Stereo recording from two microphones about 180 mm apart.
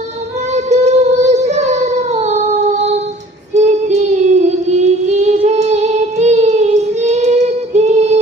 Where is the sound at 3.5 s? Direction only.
40° right (ahead or behind).